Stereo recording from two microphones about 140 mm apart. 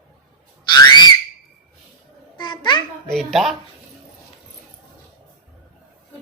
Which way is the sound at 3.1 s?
Centre (ahead or behind).